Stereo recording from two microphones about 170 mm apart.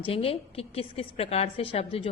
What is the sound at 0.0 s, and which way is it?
A woman's voice, 35° left (ahead or behind).